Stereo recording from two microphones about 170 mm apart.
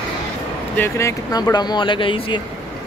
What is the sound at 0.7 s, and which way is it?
Speech, 15° left (ahead or behind).